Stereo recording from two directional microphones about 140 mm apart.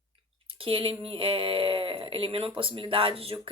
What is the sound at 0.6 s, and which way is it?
Speech, 40° right (ahead or behind).